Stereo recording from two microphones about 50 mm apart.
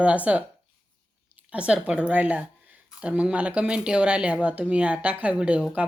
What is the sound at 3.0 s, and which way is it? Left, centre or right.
A woman's voice, centre.